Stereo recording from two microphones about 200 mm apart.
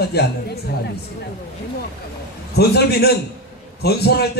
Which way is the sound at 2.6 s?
50° left (ahead or behind).